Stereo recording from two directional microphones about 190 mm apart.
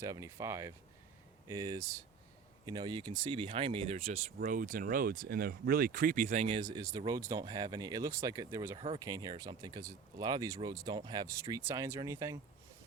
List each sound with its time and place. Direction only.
0.0 s speech: 15° right (ahead or behind); by 4.2 s 35° right (ahead or behind)
4.4 s speech: 45° right (ahead or behind)
6.6 s speech: 20° right (ahead or behind)